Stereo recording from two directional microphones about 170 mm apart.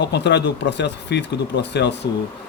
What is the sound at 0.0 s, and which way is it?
Speech, 85° left.